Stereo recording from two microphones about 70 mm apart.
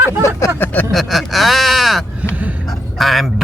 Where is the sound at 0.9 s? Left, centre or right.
Centre.